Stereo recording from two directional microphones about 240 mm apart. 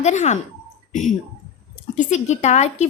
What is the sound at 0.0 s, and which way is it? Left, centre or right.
Speech, left.